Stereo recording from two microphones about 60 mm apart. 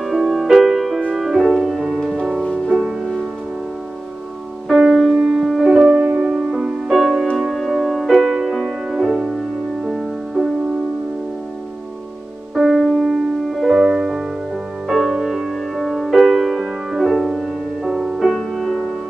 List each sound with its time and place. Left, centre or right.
0.0 s music: centre
4.6 s music: centre
5.5 s piano: centre
6.2 s music: centre
12.5 s music: centre